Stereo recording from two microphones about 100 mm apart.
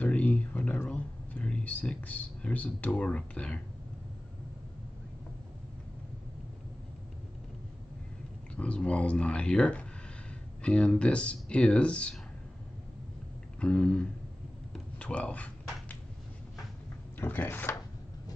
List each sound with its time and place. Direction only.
0.0 s speech: 15° left (ahead or behind)
8.5 s speech: 10° left (ahead or behind)
13.6 s speech: 10° left (ahead or behind)
14.7 s a sound: 10° left (ahead or behind)
17.2 s speech: 20° left (ahead or behind)